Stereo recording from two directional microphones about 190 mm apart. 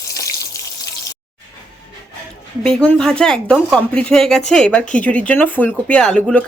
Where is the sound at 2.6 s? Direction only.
5° left (ahead or behind).